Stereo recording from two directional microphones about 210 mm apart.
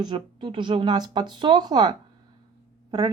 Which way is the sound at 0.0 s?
20° right (ahead or behind).